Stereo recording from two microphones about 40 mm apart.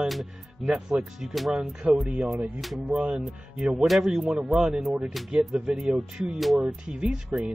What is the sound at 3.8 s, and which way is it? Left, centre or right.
Speech, centre.